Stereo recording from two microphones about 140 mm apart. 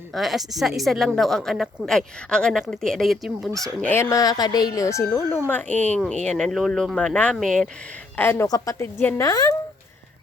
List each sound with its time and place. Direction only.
0.1 s a woman's voice: centre (ahead or behind)
3.8 s a woman's voice: 10° left (ahead or behind)
8.1 s speech: 15° left (ahead or behind)
8.4 s speech: 25° left (ahead or behind)